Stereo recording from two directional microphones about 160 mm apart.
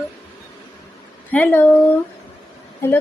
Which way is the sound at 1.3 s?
10° left (ahead or behind).